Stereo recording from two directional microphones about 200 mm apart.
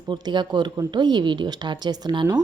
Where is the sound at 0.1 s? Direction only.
25° right (ahead or behind).